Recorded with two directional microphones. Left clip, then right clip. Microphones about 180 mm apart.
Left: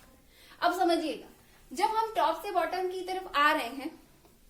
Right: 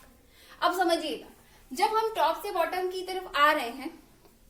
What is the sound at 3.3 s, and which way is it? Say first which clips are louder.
Speech: right 2 dB; 25° left (ahead or behind).